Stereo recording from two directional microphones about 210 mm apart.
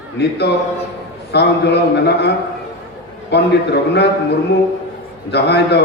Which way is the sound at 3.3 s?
55° left (ahead or behind).